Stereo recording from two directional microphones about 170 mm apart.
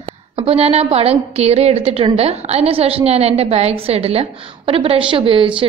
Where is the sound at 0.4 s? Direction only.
35° right (ahead or behind).